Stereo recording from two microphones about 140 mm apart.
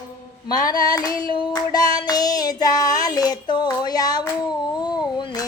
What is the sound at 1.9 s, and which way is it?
Child singing, 30° left (ahead or behind).